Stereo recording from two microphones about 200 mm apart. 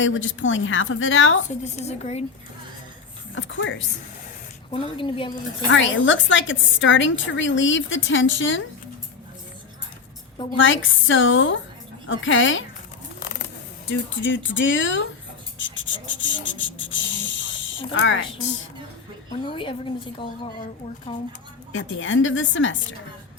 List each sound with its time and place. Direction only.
0.0 s a woman's voice: 75° left (ahead or behind)
1.6 s a woman's voice: 35° left (ahead or behind)
3.3 s a woman's voice: 70° left (ahead or behind)
4.7 s a woman's voice: 25° left (ahead or behind)
5.7 s a woman's voice: 70° left (ahead or behind)
10.6 s a woman's voice: 75° left (ahead or behind)
13.8 s a woman's voice: 70° left (ahead or behind)
15.5 s snake: 70° left (ahead or behind)
17.9 s a woman's voice: 70° left (ahead or behind)
19.5 s a woman's voice: 25° left (ahead or behind)
21.7 s a woman's voice: 75° left (ahead or behind)